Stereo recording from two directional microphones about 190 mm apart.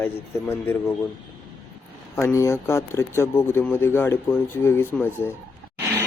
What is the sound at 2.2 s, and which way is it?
Speech, 15° left (ahead or behind).